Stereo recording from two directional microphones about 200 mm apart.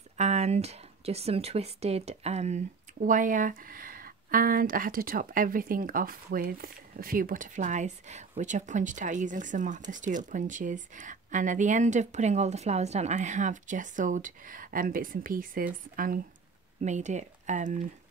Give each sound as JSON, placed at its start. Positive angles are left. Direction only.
{"t": 0.2, "sound": "speech", "side_deg": -35}